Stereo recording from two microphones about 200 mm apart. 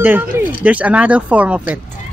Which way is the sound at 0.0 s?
10° right (ahead or behind).